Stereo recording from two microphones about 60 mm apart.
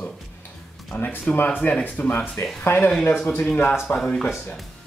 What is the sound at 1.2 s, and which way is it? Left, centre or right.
Speech, left.